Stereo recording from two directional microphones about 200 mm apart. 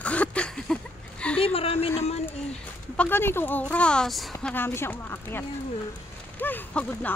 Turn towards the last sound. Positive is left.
turn(degrees=10)  # may be behind; listen again after turning